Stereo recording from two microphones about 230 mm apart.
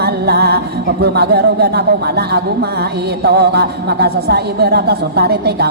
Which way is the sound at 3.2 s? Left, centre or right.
Right.